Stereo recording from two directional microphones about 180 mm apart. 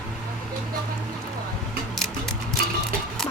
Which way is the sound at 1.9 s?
Centre (ahead or behind).